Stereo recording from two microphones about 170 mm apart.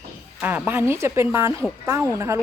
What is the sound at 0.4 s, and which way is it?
Speech, 10° right (ahead or behind).